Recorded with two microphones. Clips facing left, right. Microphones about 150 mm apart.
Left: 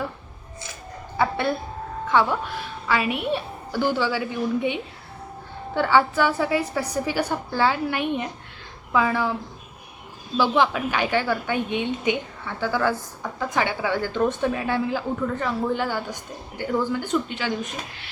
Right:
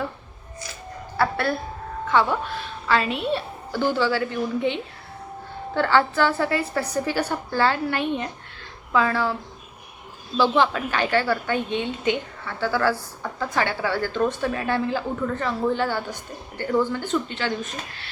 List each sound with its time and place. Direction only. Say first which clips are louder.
1.1 s a woman's voice: even; 20° left (ahead or behind)
10.3 s a woman's voice: right 1 dB; 15° left (ahead or behind)